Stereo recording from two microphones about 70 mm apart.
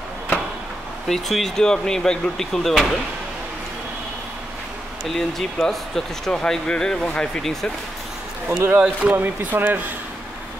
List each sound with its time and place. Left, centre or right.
1.0 s speech: centre
5.0 s speech: centre
8.5 s speech: right